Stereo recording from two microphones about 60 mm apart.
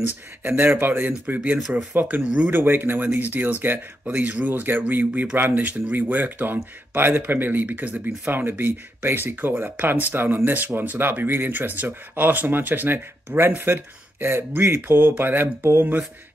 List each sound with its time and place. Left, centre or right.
0.0 s speech: right